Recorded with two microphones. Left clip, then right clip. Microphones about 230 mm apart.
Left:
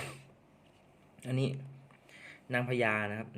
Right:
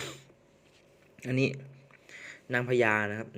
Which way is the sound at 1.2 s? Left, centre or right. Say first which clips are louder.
Right 7 dB; right.